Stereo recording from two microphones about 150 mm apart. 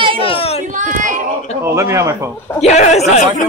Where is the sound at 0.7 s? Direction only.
60° right (ahead or behind).